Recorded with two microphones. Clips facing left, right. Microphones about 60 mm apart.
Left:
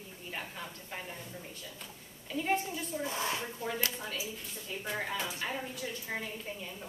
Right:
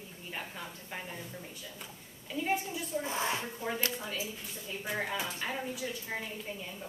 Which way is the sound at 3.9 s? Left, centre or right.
Centre.